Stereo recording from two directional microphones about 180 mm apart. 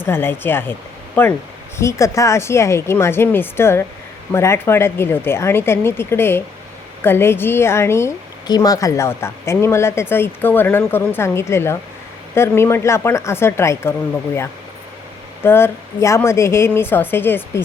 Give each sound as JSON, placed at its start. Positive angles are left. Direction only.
{"t": 0.0, "sound": "a woman's voice", "side_deg": 10}
{"t": 15.4, "sound": "a woman's voice", "side_deg": 10}